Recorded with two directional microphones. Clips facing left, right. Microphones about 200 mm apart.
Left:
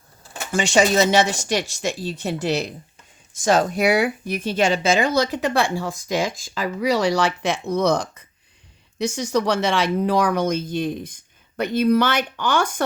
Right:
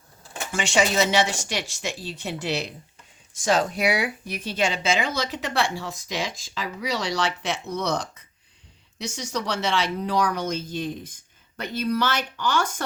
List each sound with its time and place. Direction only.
0.5 s speech: 40° left (ahead or behind); by 12.8 s 55° left (ahead or behind)